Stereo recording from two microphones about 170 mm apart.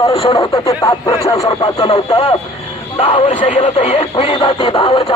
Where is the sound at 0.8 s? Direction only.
20° left (ahead or behind).